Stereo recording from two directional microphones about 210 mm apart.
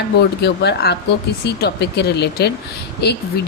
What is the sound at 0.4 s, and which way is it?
A woman's voice, 50° left (ahead or behind).